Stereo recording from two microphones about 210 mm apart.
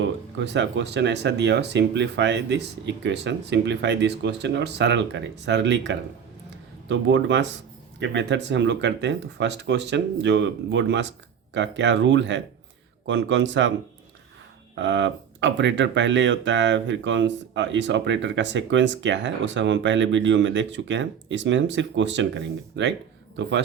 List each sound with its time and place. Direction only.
0.0 s speech: 60° right (ahead or behind)
14.8 s speech: 60° right (ahead or behind)